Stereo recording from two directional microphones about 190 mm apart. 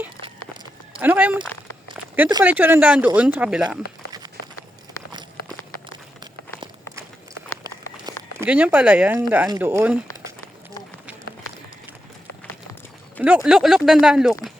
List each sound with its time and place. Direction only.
0.2 s a sound: 20° right (ahead or behind)
0.9 s speech: 10° right (ahead or behind)
2.0 s a sound: 10° right (ahead or behind)
2.4 s speech: 10° right (ahead or behind)
8.4 s speech: 5° right (ahead or behind)
13.2 s speech: 5° right (ahead or behind)